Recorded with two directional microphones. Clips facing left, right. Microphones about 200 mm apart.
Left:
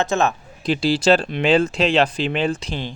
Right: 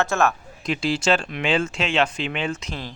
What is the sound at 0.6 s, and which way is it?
Speech, 35° left (ahead or behind).